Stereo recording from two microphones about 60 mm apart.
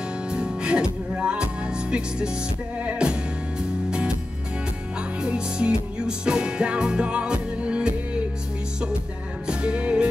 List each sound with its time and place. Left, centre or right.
0.3 s music: centre
5.2 s music: centre
9.5 s music: centre